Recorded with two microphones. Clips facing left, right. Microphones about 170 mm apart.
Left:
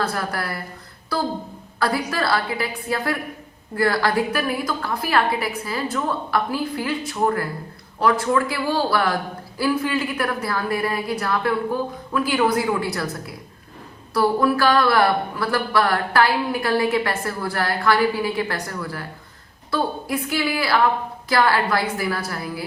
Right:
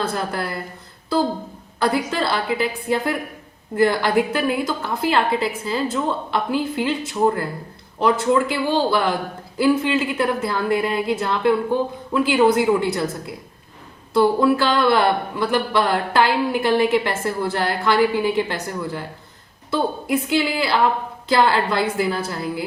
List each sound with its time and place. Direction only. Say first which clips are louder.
0.0 s speech: right 1 dB; 20° right (ahead or behind)
1.8 s speech: right 2 dB; 20° right (ahead or behind)